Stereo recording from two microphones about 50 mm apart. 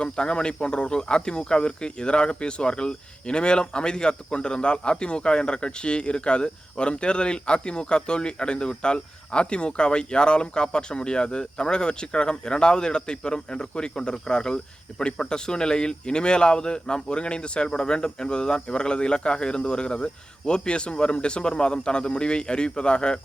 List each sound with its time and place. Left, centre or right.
0.0 s speech: centre